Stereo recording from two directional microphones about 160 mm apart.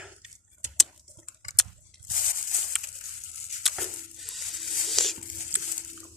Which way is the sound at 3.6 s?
Centre (ahead or behind).